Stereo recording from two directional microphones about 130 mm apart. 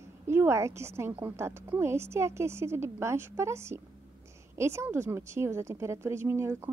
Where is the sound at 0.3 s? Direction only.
20° right (ahead or behind).